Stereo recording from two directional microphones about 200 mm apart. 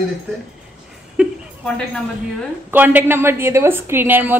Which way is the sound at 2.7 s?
10° right (ahead or behind).